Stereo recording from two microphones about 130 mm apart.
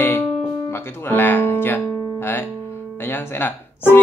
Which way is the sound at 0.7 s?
15° left (ahead or behind).